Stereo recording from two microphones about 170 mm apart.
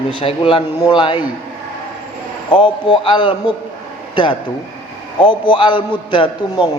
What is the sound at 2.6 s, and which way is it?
A man's voice, 25° left (ahead or behind).